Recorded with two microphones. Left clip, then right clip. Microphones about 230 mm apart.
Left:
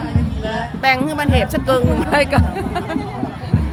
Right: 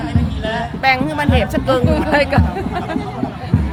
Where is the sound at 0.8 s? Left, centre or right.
Centre.